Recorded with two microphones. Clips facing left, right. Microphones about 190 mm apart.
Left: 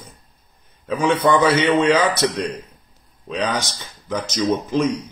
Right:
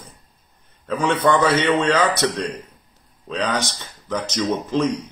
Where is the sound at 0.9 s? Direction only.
15° left (ahead or behind).